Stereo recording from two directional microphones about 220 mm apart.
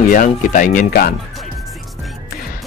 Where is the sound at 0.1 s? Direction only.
35° left (ahead or behind).